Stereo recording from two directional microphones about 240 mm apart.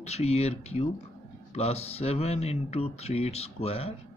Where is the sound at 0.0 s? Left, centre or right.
Left.